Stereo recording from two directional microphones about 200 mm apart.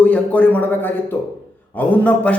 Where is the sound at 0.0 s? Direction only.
5° left (ahead or behind).